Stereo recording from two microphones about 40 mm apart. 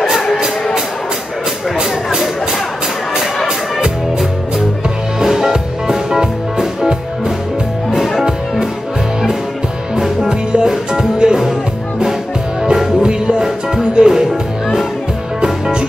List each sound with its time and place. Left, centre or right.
1.8 s music: centre
5.2 s music: centre
9.9 s music: centre
13.0 s music: centre